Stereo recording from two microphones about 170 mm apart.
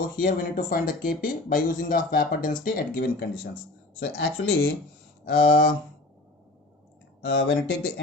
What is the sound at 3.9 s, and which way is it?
Speech, 75° left (ahead or behind).